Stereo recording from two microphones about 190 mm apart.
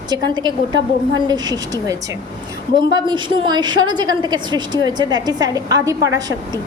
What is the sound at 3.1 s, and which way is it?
A woman's voice, 25° right (ahead or behind).